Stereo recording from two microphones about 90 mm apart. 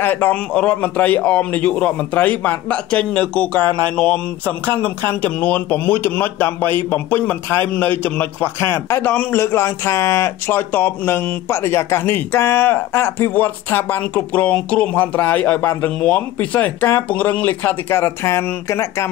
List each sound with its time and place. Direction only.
0.0 s a man's voice: 20° left (ahead or behind)